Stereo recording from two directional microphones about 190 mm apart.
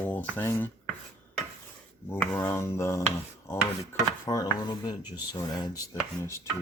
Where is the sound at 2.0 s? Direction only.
10° left (ahead or behind).